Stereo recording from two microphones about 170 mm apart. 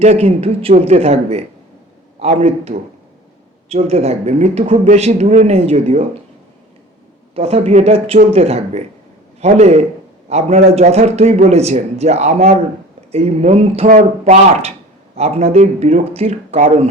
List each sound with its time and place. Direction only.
0.0 s a man's voice: 40° right (ahead or behind)
7.3 s speech: 35° right (ahead or behind)
13.8 s speech: 50° right (ahead or behind)
15.1 s speech: 35° right (ahead or behind)